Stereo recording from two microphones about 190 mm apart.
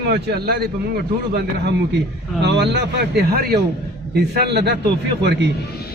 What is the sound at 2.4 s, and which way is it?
A man's voice, 60° right (ahead or behind).